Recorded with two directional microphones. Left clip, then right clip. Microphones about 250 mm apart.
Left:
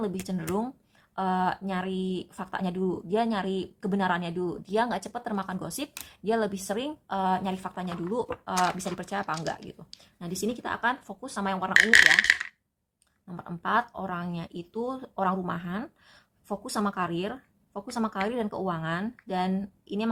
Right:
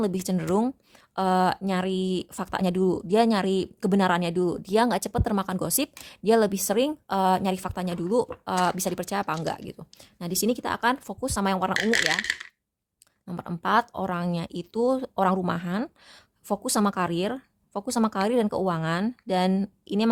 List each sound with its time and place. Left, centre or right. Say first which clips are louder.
0.0 s speech: right 5 dB; right
12.1 s coin: left 6 dB; centre
13.2 s speech: right 4 dB; right